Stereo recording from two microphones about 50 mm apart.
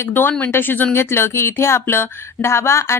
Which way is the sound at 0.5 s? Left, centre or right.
Left.